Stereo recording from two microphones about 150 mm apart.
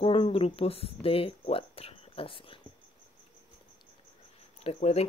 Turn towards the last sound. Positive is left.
turn(degrees=45)  # may be behind; listen again after turning